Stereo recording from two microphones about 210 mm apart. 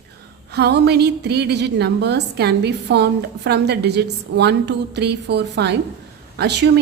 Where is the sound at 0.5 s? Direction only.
50° right (ahead or behind).